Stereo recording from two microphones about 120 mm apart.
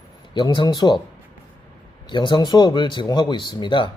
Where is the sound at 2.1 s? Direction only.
40° left (ahead or behind).